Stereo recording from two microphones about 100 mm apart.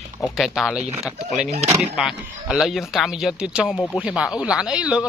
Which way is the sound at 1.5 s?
90° right.